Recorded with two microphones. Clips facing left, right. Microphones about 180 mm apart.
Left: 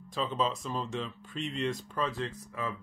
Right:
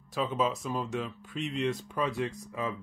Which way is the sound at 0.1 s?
10° right (ahead or behind).